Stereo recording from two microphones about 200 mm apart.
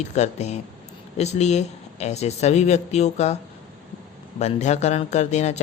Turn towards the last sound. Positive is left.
turn(degrees=35)  # may be behind; listen again after turning